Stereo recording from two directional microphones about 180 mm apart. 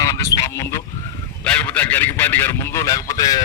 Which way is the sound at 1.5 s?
5° left (ahead or behind).